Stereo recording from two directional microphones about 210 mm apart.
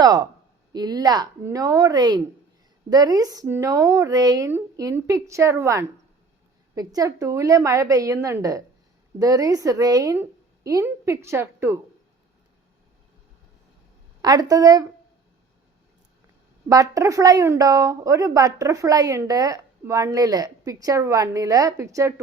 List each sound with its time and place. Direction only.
0.0 s a woman's voice: 15° right (ahead or behind)
14.2 s a woman's voice: 20° right (ahead or behind)
16.6 s a woman's voice: 15° right (ahead or behind)